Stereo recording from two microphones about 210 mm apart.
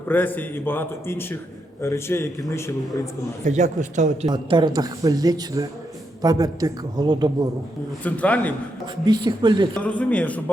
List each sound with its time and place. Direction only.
0.1 s a man's voice: 10° left (ahead or behind)
3.4 s speech: 35° right (ahead or behind)
4.3 s speech: 20° right (ahead or behind)
8.0 s a man's voice: 5° left (ahead or behind)
9.0 s speech: 20° right (ahead or behind)
9.8 s a man's voice: 5° left (ahead or behind)